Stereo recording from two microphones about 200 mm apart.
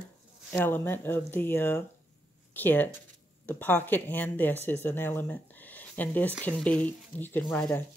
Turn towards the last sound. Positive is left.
turn(degrees=10)  # may be behind; listen again after turning